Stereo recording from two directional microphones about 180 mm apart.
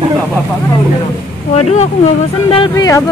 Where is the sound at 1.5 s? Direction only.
40° left (ahead or behind).